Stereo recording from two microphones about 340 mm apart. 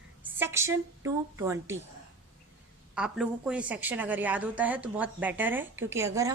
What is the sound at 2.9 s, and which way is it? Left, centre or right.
A woman's voice, centre.